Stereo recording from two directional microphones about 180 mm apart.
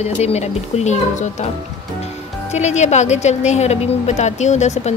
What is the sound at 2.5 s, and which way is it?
A woman's voice, 40° left (ahead or behind).